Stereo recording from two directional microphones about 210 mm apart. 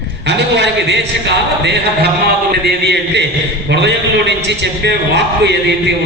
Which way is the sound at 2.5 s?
55° right (ahead or behind).